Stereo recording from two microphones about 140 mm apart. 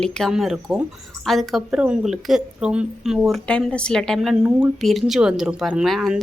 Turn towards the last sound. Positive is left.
turn(degrees=0)  # may be behind; listen again after turning